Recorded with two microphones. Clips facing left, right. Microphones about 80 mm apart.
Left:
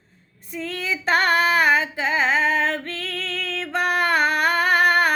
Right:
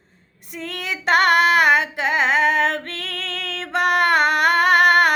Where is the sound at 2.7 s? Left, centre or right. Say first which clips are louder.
Even; right.